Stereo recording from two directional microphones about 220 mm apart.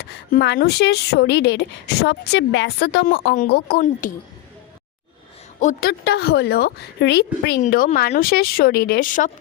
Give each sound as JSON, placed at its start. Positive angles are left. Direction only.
{"t": 0.0, "sound": "speech", "side_deg": 45}
{"t": 5.5, "sound": "speech", "side_deg": 40}
{"t": 7.6, "sound": "speech", "side_deg": 35}